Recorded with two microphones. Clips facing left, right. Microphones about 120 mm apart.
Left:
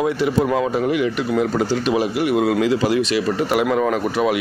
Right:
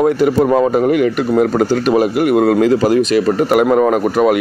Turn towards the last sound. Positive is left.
turn(degrees=-45)  # may be behind; listen again after turning